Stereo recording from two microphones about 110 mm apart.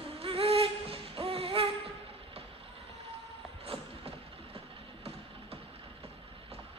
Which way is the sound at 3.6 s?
60° right (ahead or behind).